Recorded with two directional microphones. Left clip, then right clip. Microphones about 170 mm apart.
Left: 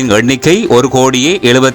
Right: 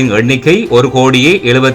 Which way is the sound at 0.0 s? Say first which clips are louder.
Left 1 dB; 35° left (ahead or behind).